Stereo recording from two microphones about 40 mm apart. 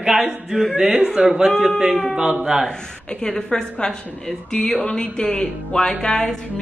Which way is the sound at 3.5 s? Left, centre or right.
Centre.